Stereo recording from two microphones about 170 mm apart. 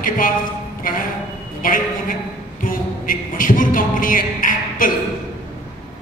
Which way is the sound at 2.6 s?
55° left (ahead or behind).